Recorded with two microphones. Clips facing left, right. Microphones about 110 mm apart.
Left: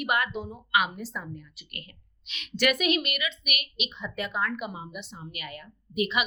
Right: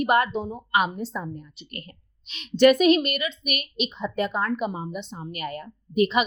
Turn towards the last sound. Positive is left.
turn(degrees=-35)  # may be behind; listen again after turning